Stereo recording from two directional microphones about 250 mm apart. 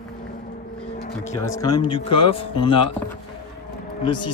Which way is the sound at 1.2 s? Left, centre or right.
Centre.